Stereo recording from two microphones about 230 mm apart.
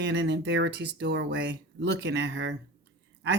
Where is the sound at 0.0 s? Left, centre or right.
Right.